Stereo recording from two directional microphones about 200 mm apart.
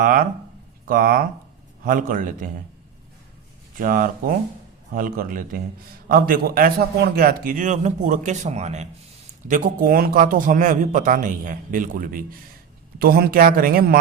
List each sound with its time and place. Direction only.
0.0 s a man's voice: 45° right (ahead or behind)
3.8 s a man's voice: 45° right (ahead or behind)